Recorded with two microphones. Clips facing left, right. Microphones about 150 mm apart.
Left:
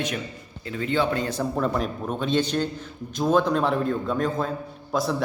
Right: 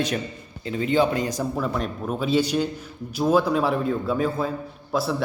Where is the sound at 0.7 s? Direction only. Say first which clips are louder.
Right 3 dB; 20° right (ahead or behind).